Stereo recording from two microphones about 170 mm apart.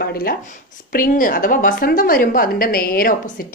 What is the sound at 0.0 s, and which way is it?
A woman's voice, 65° left (ahead or behind).